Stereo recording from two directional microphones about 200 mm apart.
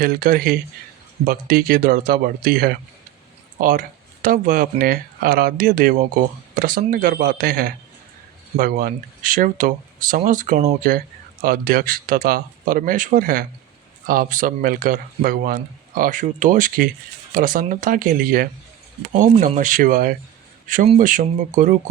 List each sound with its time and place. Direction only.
0.0 s speech: 45° right (ahead or behind)